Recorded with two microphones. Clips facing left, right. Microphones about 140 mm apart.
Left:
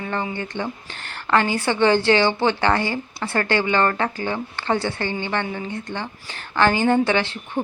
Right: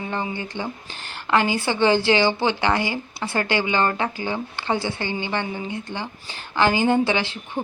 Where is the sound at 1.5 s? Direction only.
25° right (ahead or behind).